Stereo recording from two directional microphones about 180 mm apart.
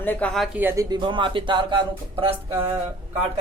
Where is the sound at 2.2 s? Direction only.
30° right (ahead or behind).